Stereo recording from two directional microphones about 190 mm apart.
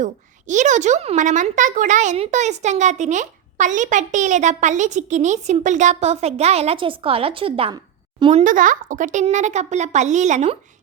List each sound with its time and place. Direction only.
0.0 s a woman's voice: 40° right (ahead or behind)